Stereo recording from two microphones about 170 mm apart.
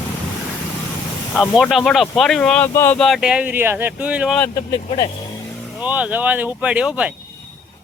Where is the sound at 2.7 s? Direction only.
15° left (ahead or behind).